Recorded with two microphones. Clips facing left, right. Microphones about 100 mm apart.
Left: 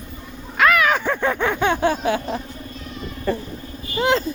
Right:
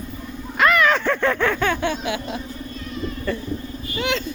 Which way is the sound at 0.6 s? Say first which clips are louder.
Even; 5° left (ahead or behind).